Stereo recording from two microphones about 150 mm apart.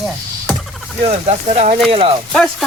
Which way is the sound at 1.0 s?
45° right (ahead or behind).